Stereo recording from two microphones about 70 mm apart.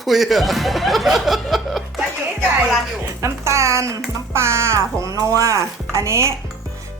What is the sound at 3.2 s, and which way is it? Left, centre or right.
Speech, right.